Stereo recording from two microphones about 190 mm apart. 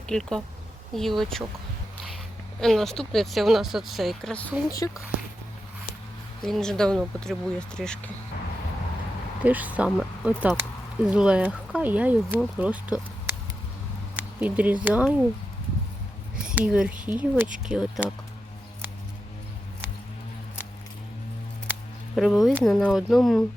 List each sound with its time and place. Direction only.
0.1 s speech: centre (ahead or behind)
2.6 s speech: centre (ahead or behind)
4.8 s speech: 15° left (ahead or behind)
6.4 s speech: 5° left (ahead or behind)
9.4 s speech: 10° right (ahead or behind)
16.3 s speech: 5° right (ahead or behind)
21.7 s speech: centre (ahead or behind)